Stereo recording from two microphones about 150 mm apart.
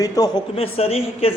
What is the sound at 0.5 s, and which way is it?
Speech, 40° left (ahead or behind).